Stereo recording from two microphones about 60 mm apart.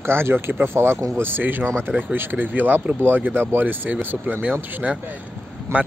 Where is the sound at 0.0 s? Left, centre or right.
Right.